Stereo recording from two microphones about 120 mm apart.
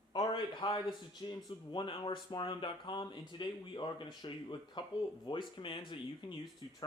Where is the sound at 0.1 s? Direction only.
35° left (ahead or behind).